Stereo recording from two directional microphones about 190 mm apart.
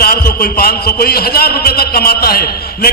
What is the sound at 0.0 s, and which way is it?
A man's voice, 50° left (ahead or behind).